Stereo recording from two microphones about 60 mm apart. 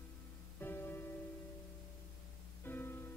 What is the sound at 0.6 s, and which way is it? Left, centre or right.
Music, left.